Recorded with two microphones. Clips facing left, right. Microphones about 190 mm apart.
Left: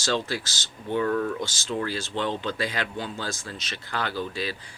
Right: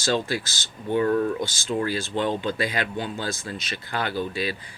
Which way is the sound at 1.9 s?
50° right (ahead or behind).